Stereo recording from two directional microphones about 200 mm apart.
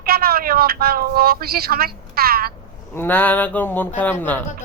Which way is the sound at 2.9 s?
10° left (ahead or behind).